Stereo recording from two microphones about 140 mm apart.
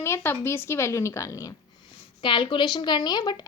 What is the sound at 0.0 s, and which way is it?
A woman's voice, 20° left (ahead or behind).